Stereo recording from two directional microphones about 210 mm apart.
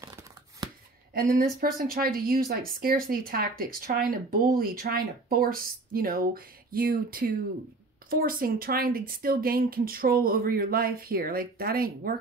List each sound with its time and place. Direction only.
0.0 s scissors: 20° right (ahead or behind)
1.1 s a woman's voice: 45° right (ahead or behind)